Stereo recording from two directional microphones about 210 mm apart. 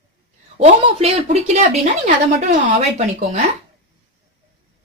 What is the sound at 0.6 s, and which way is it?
A woman's voice, 30° right (ahead or behind).